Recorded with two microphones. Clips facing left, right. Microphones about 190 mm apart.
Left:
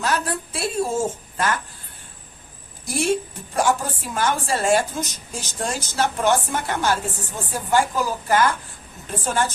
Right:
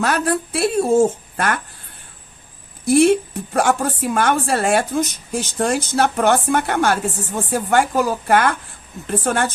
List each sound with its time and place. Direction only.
0.0 s a woman's voice: 65° right (ahead or behind)
2.8 s a woman's voice: 60° right (ahead or behind)